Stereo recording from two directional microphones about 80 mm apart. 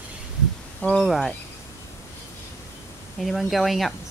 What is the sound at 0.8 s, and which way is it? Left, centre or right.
Speech, centre.